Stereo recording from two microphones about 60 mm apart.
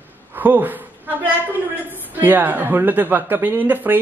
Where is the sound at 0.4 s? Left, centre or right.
Right.